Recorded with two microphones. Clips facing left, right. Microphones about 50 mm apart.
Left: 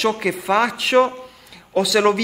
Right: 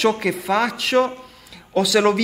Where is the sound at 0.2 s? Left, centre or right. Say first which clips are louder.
Left 2 dB; centre.